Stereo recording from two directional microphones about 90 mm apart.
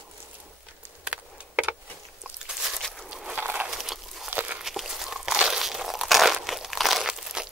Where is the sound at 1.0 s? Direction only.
15° right (ahead or behind).